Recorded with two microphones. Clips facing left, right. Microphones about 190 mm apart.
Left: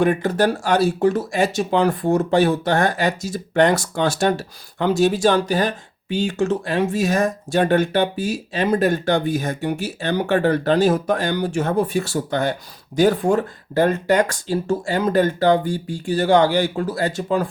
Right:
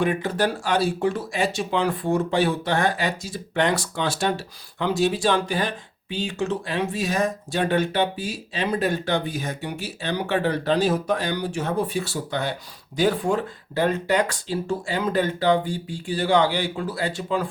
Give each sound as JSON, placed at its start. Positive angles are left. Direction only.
{"t": 0.0, "sound": "speech", "side_deg": 45}